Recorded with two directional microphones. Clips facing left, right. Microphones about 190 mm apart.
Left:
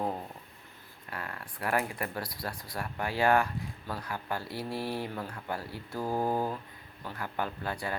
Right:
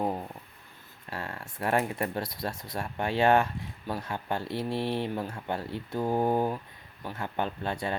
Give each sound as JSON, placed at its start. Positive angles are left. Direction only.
{"t": 1.1, "sound": "speech", "side_deg": -25}